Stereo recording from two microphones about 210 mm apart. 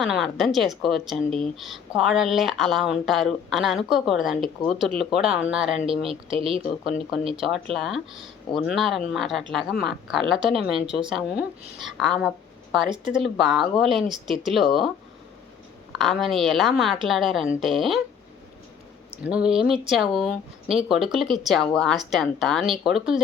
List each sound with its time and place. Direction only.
0.0 s speech: centre (ahead or behind)
6.1 s speech: 25° right (ahead or behind)
7.3 s speech: centre (ahead or behind)
16.0 s speech: centre (ahead or behind)
19.3 s speech: 5° right (ahead or behind)